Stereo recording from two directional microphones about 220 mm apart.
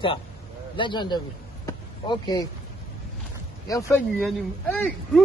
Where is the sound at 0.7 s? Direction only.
20° left (ahead or behind).